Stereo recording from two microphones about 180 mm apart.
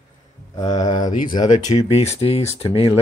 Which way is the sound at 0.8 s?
20° left (ahead or behind).